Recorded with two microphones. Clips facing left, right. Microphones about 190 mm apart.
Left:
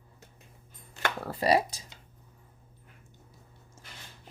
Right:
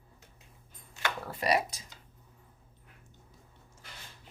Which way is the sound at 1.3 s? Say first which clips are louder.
Left 4 dB; 30° left (ahead or behind).